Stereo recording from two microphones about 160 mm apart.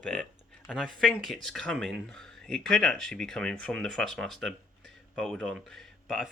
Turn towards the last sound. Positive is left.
turn(degrees=0)  # may be behind; listen again after turning